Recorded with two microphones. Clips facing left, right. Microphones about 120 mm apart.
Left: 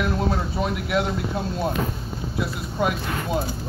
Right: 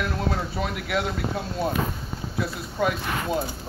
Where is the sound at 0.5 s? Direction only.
20° left (ahead or behind).